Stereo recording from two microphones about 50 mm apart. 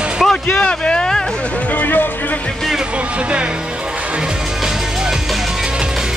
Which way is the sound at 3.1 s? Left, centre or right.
Right.